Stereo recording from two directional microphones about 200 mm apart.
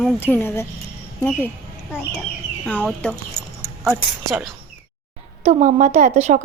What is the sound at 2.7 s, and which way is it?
Speech, 5° left (ahead or behind).